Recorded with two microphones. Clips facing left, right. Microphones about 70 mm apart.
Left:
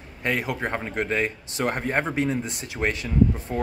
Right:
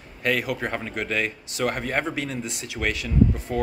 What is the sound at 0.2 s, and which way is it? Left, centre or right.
Speech, left.